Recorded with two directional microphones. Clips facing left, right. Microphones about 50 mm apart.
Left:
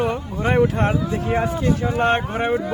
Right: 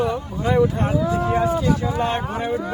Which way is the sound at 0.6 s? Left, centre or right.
Left.